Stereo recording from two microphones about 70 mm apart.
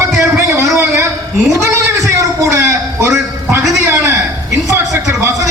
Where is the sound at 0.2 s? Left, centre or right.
Right.